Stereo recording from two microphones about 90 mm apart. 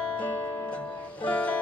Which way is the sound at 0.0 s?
15° left (ahead or behind).